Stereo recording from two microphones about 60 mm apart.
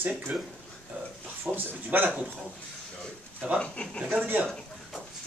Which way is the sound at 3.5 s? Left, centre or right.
Centre.